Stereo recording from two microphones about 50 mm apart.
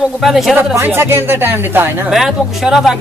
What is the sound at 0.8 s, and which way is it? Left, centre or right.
Speech, right.